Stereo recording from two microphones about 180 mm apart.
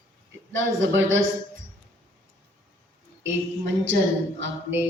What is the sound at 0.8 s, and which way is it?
Speech, 90° right.